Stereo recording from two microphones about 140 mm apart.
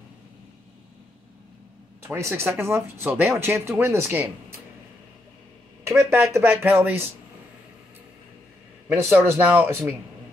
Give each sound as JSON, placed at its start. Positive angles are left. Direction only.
{"t": 2.1, "sound": "speech", "side_deg": -20}
{"t": 5.9, "sound": "speech", "side_deg": -20}
{"t": 8.8, "sound": "speech", "side_deg": -15}